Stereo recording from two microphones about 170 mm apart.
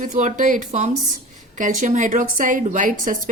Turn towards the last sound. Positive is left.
turn(degrees=-50)  # may be behind; listen again after turning